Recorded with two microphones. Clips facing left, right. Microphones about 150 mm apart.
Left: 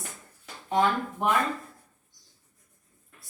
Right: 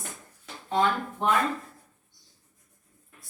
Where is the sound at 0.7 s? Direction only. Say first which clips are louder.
Left 1 dB; 15° left (ahead or behind).